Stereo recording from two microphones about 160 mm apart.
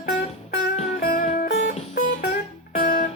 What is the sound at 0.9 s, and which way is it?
Music, 65° left (ahead or behind).